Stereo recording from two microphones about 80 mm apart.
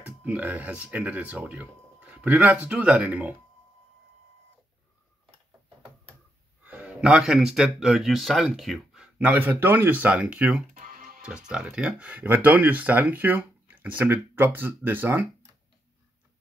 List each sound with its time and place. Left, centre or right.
0.0 s speech: centre
6.6 s speech: centre
8.5 s a sound: centre
9.2 s speech: right